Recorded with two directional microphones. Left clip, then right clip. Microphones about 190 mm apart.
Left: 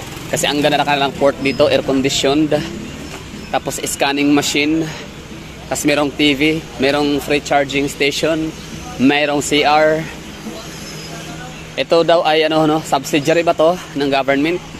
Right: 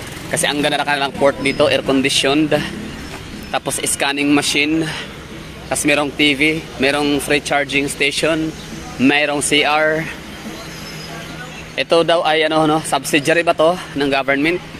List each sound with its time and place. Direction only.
0.3 s speech: 15° left (ahead or behind)
1.2 s speech: 15° left (ahead or behind)
1.7 s speech: 5° left (ahead or behind)
11.7 s speech: 10° left (ahead or behind)